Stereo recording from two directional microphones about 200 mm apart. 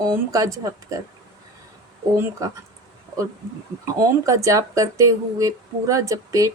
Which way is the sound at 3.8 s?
15° right (ahead or behind).